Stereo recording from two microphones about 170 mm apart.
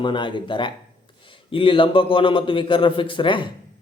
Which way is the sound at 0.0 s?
30° left (ahead or behind).